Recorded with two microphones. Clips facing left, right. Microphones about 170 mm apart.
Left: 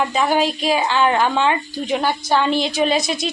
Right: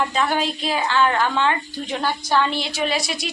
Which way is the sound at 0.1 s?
15° left (ahead or behind).